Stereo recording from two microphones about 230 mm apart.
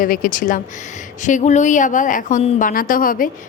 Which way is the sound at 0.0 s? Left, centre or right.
Left.